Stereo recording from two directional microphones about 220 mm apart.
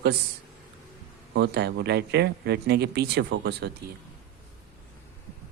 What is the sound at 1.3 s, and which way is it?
Speech, 50° right (ahead or behind).